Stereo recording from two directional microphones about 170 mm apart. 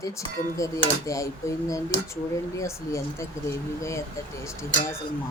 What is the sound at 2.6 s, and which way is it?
Speech, 15° left (ahead or behind).